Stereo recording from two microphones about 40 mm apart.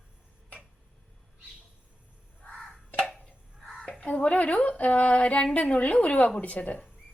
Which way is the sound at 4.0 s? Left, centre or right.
Left.